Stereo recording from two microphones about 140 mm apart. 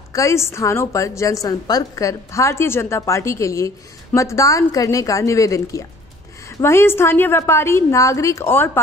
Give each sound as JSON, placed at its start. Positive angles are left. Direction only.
{"t": 0.1, "sound": "a woman's voice", "side_deg": 20}